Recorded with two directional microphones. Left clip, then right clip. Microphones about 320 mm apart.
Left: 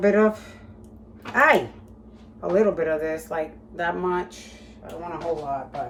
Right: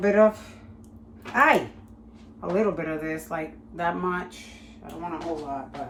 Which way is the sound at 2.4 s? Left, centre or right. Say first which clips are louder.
Left 5 dB; centre.